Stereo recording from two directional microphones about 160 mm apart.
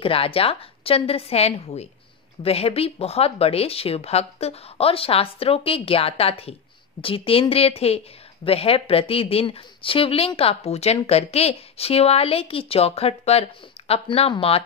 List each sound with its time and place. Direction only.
0.0 s speech: 35° left (ahead or behind)